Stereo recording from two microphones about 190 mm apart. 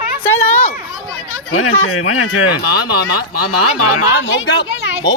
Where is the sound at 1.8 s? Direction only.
90° left.